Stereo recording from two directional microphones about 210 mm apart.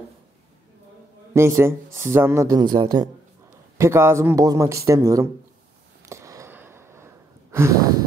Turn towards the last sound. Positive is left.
turn(degrees=-15)  # may be behind; listen again after turning